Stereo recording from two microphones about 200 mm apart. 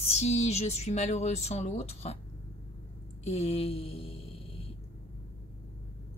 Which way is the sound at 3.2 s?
30° left (ahead or behind).